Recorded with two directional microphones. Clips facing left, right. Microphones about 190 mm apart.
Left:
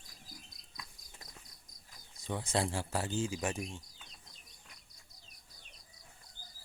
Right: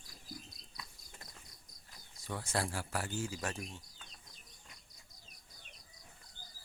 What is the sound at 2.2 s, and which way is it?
Speech, 20° left (ahead or behind).